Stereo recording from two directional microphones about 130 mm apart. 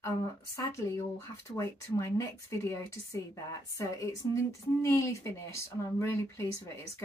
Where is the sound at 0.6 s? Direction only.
25° left (ahead or behind).